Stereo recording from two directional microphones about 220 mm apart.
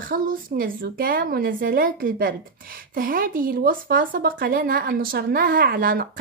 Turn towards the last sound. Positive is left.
turn(degrees=-40)  # may be behind; listen again after turning